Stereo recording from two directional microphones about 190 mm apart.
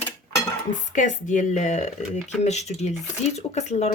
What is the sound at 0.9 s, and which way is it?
Speech, 40° left (ahead or behind).